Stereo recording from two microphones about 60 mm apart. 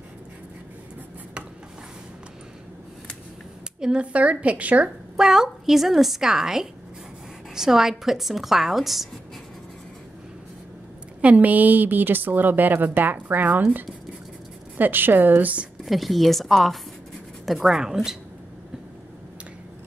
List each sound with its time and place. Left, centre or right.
3.8 s a woman's voice: centre
5.1 s a woman's voice: centre
11.1 s a woman's voice: right
15.8 s a woman's voice: centre